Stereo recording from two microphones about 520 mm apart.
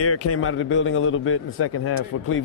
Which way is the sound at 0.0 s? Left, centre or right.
Left.